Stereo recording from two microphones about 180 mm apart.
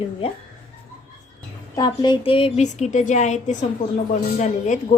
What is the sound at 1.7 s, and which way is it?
A woman's voice, 25° left (ahead or behind).